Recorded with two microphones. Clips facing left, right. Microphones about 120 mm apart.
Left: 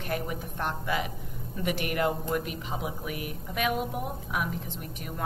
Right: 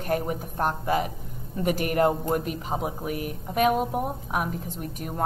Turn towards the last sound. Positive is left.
turn(degrees=-40)  # may be behind; listen again after turning